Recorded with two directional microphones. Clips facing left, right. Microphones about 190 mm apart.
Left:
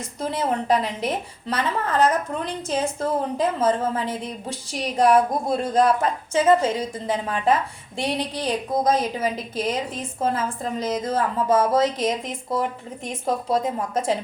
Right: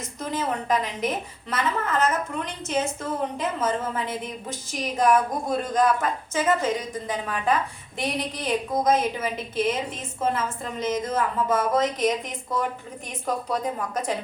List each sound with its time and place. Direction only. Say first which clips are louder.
0.2 s a woman's voice: left 4 dB; 30° left (ahead or behind)